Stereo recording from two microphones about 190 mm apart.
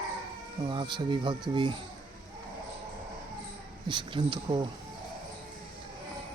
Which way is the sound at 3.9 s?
25° right (ahead or behind).